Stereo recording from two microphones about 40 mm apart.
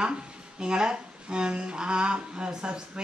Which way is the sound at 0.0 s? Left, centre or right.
Centre.